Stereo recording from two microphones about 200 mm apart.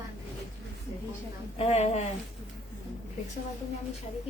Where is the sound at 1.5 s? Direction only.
30° left (ahead or behind).